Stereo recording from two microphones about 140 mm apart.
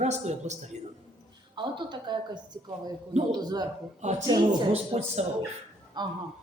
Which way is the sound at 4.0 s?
55° right (ahead or behind).